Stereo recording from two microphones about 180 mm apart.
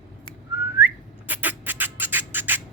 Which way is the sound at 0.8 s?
10° right (ahead or behind).